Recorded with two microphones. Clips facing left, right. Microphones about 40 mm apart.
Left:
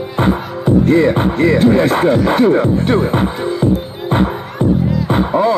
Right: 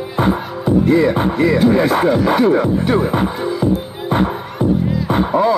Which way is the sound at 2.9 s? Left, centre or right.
Left.